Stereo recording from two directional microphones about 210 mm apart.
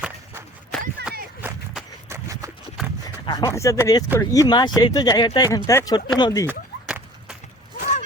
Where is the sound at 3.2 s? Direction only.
15° left (ahead or behind).